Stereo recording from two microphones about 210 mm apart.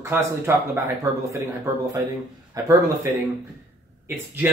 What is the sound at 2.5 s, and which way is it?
Speech, 15° right (ahead or behind).